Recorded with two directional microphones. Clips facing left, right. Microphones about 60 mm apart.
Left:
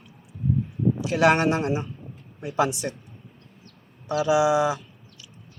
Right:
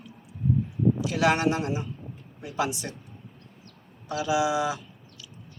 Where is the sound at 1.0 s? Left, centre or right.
Left.